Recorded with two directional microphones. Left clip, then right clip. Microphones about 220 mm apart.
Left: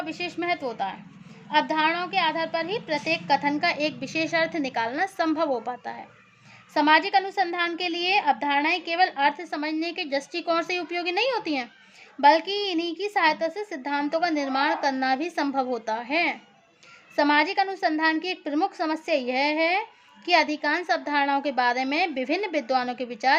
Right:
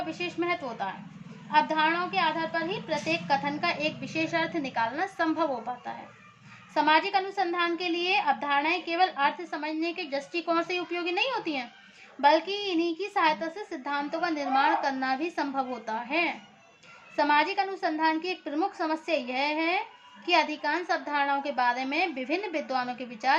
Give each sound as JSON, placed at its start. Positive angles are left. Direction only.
{"t": 0.0, "sound": "a woman's voice", "side_deg": 50}